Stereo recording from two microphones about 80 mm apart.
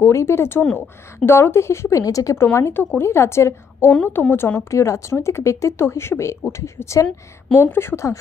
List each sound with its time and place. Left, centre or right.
0.0 s speech: left
2.3 s a woman's voice: left
4.6 s speech: left